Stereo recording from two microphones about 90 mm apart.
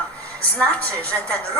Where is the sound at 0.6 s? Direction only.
15° left (ahead or behind).